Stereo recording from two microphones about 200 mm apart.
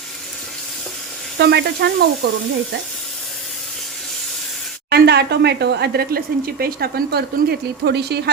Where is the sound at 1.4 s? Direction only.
55° right (ahead or behind).